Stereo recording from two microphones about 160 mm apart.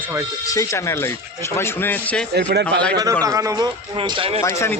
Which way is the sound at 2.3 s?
90° right.